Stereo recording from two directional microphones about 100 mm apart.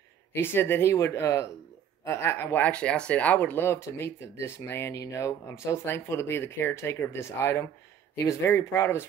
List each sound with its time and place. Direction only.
0.3 s speech: 20° left (ahead or behind)